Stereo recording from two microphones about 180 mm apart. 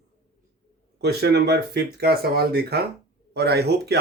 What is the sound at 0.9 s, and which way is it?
Speech, 65° right (ahead or behind).